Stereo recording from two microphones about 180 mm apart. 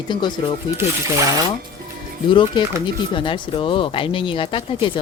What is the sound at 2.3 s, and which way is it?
Speech, 25° left (ahead or behind).